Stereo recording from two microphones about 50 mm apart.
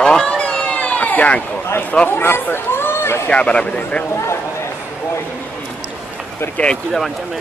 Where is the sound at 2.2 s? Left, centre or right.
Left.